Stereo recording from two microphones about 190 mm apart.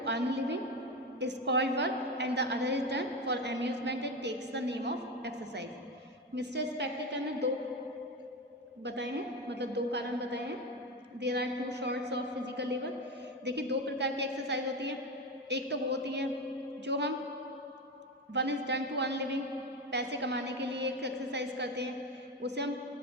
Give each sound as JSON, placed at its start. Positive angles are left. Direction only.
{"t": 0.0, "sound": "a sound", "side_deg": -65}
{"t": 1.2, "sound": "a woman's voice", "side_deg": -65}
{"t": 8.8, "sound": "a woman's voice", "side_deg": -65}
{"t": 18.3, "sound": "a woman's voice", "side_deg": -65}